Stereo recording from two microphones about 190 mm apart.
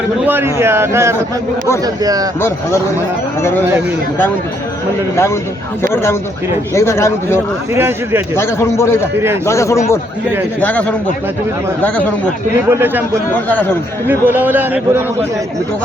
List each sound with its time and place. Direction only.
0.3 s a man's voice: 10° right (ahead or behind)
5.1 s a man's voice: 15° left (ahead or behind)
7.7 s a man's voice: 15° right (ahead or behind)
8.4 s a man's voice: 15° left (ahead or behind)
12.6 s a man's voice: 10° right (ahead or behind)
13.5 s a man's voice: 10° left (ahead or behind)
14.1 s a man's voice: 10° right (ahead or behind)